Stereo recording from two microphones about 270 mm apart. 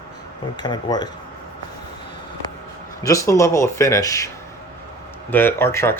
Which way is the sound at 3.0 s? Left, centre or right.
Centre.